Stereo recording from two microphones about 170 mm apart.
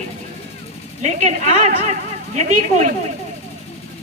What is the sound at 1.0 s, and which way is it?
A woman's voice, 45° right (ahead or behind).